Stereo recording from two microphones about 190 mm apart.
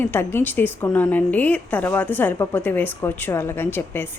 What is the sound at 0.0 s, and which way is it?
A woman's voice, 10° left (ahead or behind).